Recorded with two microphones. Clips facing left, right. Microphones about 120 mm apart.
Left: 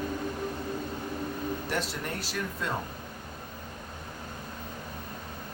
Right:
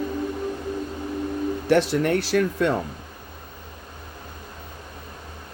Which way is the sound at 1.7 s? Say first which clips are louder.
Right 14 dB; 75° right (ahead or behind).